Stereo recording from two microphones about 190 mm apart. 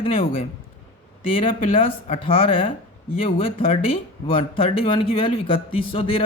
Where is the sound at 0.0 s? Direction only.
30° left (ahead or behind).